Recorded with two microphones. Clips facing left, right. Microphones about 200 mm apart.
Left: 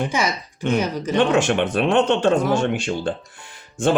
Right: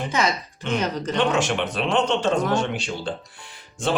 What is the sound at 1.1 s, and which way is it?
Speech, 50° left (ahead or behind).